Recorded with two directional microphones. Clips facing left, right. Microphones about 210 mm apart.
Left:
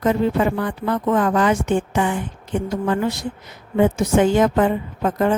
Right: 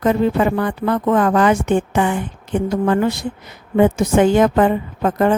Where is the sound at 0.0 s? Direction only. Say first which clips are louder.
Right 2 dB; 65° right (ahead or behind).